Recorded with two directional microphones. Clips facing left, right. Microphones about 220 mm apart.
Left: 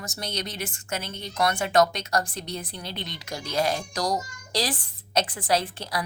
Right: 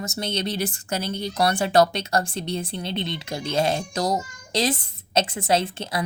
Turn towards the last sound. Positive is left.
turn(degrees=-25)  # may be behind; listen again after turning